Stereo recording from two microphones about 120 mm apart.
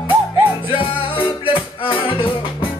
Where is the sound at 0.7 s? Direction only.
45° left (ahead or behind).